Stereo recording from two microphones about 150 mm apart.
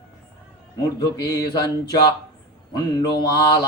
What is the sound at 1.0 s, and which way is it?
Mantra, 25° left (ahead or behind).